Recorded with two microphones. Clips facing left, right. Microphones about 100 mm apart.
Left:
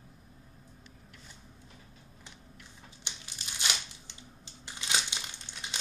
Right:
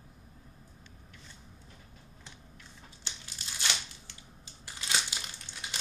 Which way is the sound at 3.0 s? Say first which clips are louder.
Even; 20° left (ahead or behind).